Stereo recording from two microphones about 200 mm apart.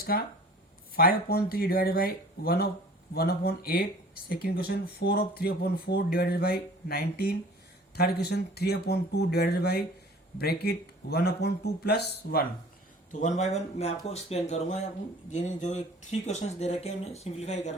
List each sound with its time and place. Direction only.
0.0 s speech: 50° left (ahead or behind)
13.1 s speech: 35° left (ahead or behind)